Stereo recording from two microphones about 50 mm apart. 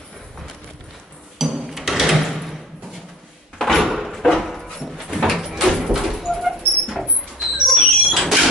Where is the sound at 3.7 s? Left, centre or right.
Centre.